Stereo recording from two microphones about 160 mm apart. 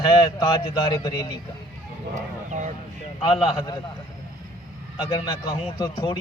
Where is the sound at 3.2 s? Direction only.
30° left (ahead or behind).